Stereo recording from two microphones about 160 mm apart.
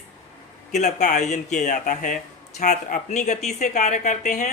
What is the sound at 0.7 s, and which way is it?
Speech, 45° left (ahead or behind).